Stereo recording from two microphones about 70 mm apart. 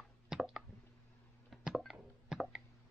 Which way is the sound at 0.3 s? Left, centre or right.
Centre.